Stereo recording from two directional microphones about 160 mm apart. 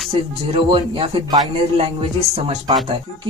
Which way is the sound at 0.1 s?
35° right (ahead or behind).